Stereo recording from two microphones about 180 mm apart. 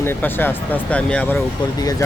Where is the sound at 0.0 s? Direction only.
10° left (ahead or behind).